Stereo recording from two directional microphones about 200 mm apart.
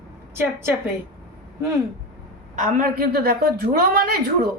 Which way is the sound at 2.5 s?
45° right (ahead or behind).